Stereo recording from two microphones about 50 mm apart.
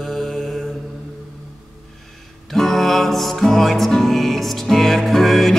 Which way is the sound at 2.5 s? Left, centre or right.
Centre.